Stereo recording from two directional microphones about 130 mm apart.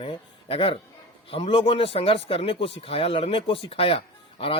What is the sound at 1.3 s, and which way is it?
Speech, 45° left (ahead or behind).